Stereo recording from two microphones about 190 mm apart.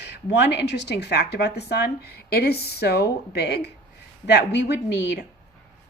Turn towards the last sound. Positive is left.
turn(degrees=60)  # may be behind; listen again after turning